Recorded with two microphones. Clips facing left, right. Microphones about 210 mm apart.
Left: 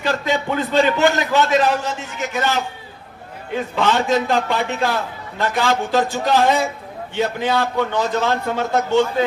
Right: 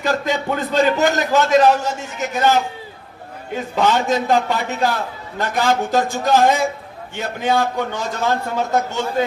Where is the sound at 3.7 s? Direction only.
45° right (ahead or behind).